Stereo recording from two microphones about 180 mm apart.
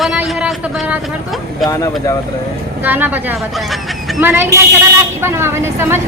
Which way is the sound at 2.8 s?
10° right (ahead or behind).